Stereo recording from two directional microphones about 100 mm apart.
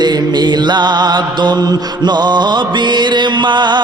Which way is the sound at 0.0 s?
45° right (ahead or behind).